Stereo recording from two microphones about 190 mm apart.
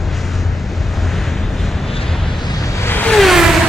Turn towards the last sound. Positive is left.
turn(degrees=0)  # may be behind; listen again after turning